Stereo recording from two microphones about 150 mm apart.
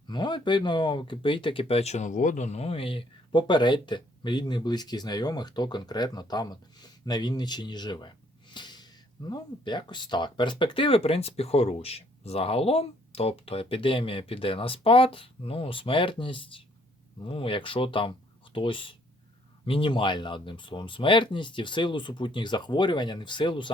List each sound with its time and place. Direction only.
0.1 s speech: 30° left (ahead or behind)
8.5 s gasp: 30° left (ahead or behind)
9.3 s speech: 30° left (ahead or behind)